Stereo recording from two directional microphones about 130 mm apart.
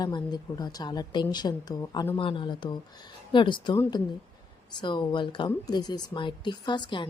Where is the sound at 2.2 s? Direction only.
40° left (ahead or behind).